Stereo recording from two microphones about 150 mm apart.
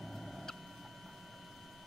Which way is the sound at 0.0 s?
Centre (ahead or behind).